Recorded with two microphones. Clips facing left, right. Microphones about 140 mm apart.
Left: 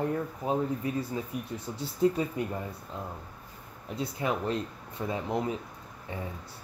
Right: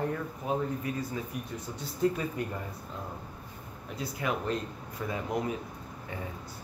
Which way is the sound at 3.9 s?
30° left (ahead or behind).